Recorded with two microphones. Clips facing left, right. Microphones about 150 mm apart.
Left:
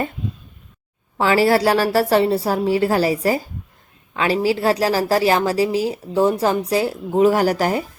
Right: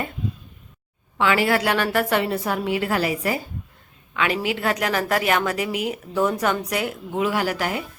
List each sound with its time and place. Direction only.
1.2 s a woman's voice: 35° left (ahead or behind)